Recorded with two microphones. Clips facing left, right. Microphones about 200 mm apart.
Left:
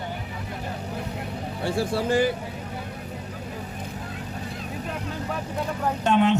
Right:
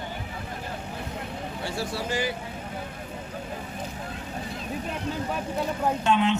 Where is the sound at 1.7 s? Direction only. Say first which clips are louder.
Left 8 dB; 55° left (ahead or behind).